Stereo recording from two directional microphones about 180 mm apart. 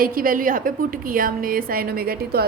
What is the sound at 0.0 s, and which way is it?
A woman's voice, 55° right (ahead or behind).